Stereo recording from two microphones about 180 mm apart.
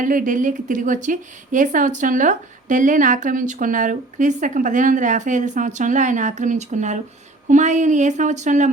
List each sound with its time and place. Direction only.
0.0 s a woman's voice: 50° right (ahead or behind)